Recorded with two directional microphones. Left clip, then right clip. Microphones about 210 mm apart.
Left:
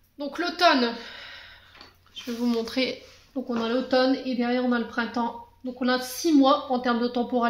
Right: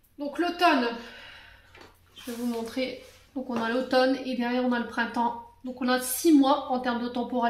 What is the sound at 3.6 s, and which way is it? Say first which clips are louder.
A woman's voice: left 1 dB; 25° left (ahead or behind).